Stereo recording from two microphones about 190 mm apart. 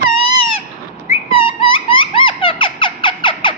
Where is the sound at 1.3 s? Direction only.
25° left (ahead or behind).